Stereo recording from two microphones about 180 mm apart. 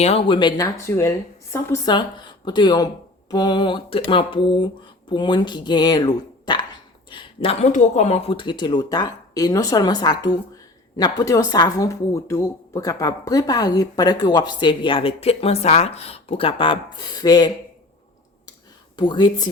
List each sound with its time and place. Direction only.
0.0 s speech: 30° left (ahead or behind)
18.9 s speech: 25° left (ahead or behind)